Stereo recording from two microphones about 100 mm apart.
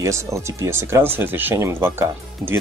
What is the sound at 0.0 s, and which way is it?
Speech, 30° right (ahead or behind).